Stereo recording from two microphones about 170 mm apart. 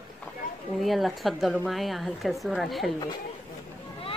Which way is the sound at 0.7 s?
Centre (ahead or behind).